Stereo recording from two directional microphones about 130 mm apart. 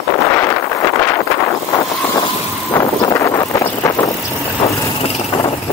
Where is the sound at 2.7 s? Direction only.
25° left (ahead or behind).